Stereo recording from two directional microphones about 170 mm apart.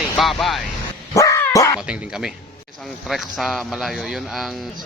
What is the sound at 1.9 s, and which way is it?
Speech, 5° right (ahead or behind).